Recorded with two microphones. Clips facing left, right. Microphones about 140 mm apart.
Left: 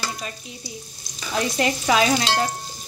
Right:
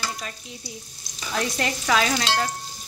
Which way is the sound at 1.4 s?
10° left (ahead or behind).